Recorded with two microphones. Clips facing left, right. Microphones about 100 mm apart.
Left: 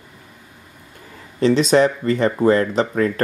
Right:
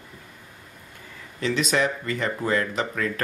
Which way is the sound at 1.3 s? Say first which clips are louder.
Left 9 dB; 35° left (ahead or behind).